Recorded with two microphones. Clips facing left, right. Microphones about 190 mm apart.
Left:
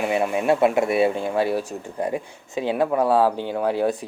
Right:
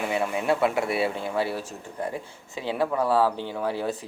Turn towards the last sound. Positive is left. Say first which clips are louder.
# left 6 dB
turn(degrees=15)  # may be behind; listen again after turning